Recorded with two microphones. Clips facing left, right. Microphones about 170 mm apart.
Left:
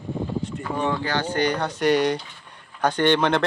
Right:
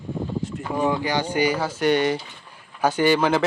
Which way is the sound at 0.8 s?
10° right (ahead or behind).